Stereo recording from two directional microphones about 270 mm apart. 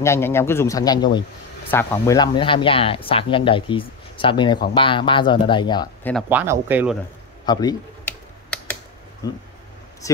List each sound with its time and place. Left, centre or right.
0.0 s a man's voice: centre
6.2 s speech: centre
7.4 s typing: centre
9.2 s a man's voice: centre